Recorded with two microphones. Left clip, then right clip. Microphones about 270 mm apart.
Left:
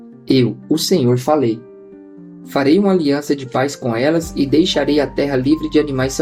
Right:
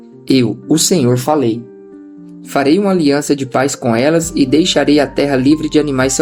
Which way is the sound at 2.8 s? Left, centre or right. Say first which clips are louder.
Right 3 dB; right.